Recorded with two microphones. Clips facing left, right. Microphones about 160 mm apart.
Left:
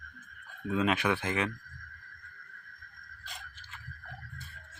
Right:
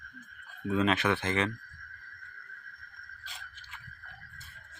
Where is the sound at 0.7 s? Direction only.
10° left (ahead or behind).